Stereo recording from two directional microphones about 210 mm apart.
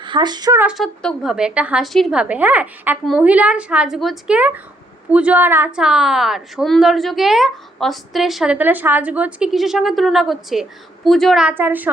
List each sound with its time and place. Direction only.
0.0 s speech: 20° right (ahead or behind)
0.6 s a woman's voice: centre (ahead or behind)